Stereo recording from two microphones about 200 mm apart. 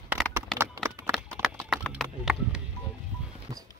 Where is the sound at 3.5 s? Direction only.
15° right (ahead or behind).